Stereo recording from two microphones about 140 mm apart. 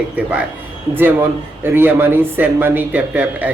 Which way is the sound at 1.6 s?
15° right (ahead or behind).